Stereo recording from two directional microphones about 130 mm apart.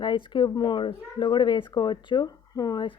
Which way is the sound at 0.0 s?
35° left (ahead or behind).